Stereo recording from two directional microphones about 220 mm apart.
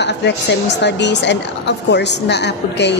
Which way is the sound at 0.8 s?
50° left (ahead or behind).